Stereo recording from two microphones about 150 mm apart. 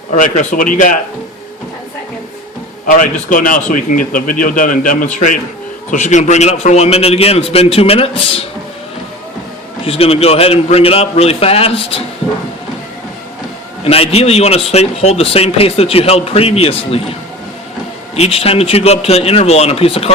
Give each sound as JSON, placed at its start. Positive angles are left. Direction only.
{"t": 0.2, "sound": "a man's voice", "side_deg": 60}
{"t": 2.8, "sound": "a man's voice", "side_deg": 65}
{"t": 9.8, "sound": "a man's voice", "side_deg": 40}
{"t": 13.8, "sound": "a man's voice", "side_deg": 40}
{"t": 18.2, "sound": "a man's voice", "side_deg": 40}